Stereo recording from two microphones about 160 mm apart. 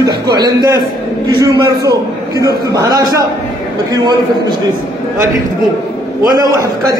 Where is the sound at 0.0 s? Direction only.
25° right (ahead or behind).